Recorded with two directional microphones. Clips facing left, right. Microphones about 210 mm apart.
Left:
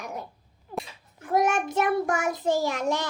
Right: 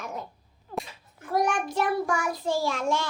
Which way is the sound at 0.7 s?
15° left (ahead or behind).